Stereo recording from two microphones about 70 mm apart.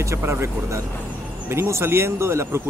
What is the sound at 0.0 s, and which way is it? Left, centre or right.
Speech, right.